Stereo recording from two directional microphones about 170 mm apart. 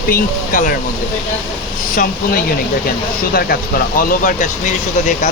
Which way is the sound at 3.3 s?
60° left (ahead or behind).